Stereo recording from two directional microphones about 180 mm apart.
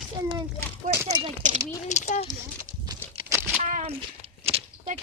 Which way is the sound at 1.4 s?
45° right (ahead or behind).